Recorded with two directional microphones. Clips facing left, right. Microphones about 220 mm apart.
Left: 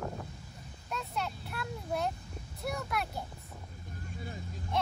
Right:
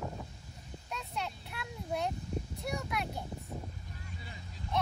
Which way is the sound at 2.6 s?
Centre (ahead or behind).